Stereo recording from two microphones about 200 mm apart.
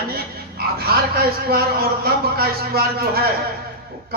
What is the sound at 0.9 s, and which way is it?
Speech, 50° right (ahead or behind).